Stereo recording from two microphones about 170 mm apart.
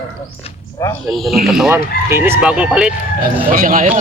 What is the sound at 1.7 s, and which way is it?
Speech, 15° right (ahead or behind).